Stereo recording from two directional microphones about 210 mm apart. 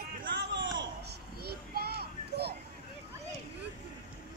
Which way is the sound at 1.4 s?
50° right (ahead or behind).